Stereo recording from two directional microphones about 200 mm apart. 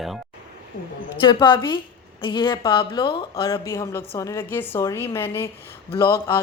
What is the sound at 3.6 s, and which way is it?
A woman's voice, 15° left (ahead or behind).